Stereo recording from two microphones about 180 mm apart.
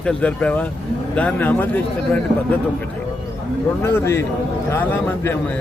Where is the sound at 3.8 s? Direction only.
15° left (ahead or behind).